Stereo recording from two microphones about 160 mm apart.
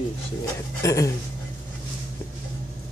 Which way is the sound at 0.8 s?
20° left (ahead or behind).